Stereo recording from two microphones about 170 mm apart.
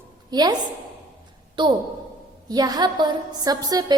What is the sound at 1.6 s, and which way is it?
A woman's voice, 25° right (ahead or behind).